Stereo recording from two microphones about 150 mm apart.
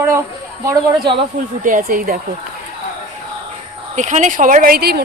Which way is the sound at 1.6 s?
65° right (ahead or behind).